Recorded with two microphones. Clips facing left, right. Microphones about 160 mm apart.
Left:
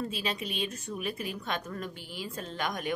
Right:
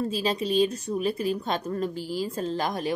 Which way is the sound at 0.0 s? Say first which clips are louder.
Right 7 dB; 35° right (ahead or behind).